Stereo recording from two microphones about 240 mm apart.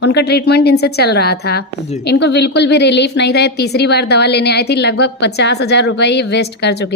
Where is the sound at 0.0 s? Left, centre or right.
Left.